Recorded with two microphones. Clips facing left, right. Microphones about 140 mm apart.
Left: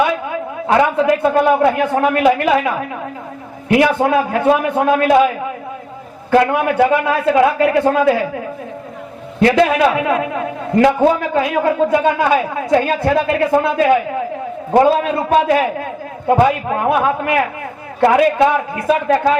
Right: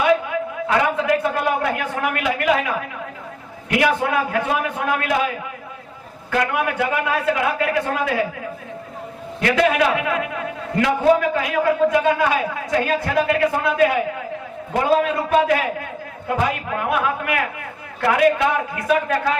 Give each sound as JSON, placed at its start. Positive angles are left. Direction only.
{"t": 1.2, "sound": "a man's voice", "side_deg": 30}
{"t": 3.7, "sound": "a man's voice", "side_deg": 30}
{"t": 6.3, "sound": "a man's voice", "side_deg": 30}
{"t": 9.4, "sound": "a man's voice", "side_deg": 30}
{"t": 15.0, "sound": "a man's voice", "side_deg": 30}